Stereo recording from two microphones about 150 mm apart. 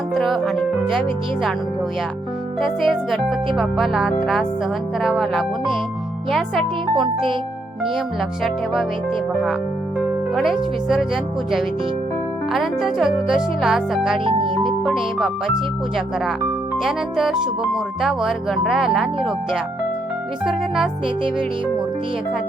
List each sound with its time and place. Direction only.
0.1 s speech: centre (ahead or behind)
2.6 s speech: centre (ahead or behind)
8.4 s speech: centre (ahead or behind)
14.3 s speech: 35° right (ahead or behind)
14.8 s speech: 5° right (ahead or behind)
16.7 s speech: 5° right (ahead or behind)